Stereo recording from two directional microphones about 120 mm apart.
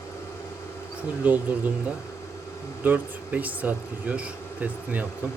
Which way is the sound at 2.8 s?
15° right (ahead or behind).